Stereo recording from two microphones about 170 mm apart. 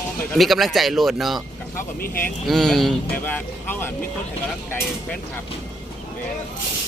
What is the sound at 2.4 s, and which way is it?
A man's voice, centre (ahead or behind).